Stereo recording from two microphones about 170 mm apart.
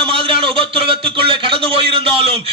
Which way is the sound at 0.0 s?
30° right (ahead or behind).